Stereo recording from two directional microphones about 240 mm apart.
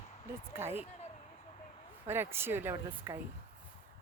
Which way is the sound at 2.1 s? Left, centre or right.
Centre.